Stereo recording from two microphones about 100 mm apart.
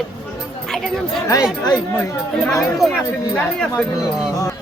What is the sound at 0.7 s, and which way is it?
Chatter, 5° left (ahead or behind).